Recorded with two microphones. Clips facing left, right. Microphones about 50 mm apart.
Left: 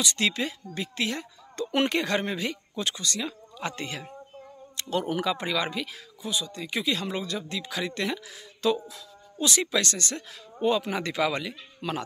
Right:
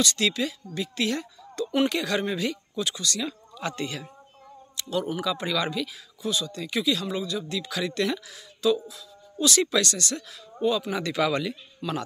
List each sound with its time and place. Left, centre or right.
0.0 s speech: left
4.7 s speech: left
5.4 s speech: left
8.6 s speech: left
9.4 s speech: left
11.2 s speech: centre
11.8 s speech: left